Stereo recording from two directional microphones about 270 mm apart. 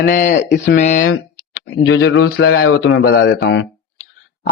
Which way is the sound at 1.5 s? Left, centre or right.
Left.